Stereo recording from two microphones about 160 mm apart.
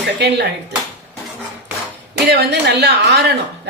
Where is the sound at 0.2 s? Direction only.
90° right.